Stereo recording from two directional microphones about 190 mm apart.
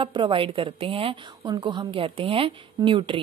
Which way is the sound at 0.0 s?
25° right (ahead or behind).